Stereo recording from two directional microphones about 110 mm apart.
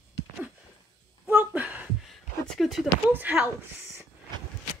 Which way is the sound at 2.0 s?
Centre (ahead or behind).